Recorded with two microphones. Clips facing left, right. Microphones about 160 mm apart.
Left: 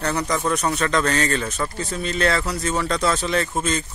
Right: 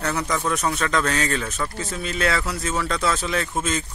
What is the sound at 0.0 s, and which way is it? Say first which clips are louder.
Speech: left 2 dB; centre (ahead or behind).